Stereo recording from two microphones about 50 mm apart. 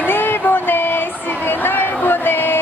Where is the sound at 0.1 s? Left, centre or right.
Left.